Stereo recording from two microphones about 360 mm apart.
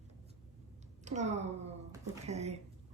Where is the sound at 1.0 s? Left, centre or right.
Centre.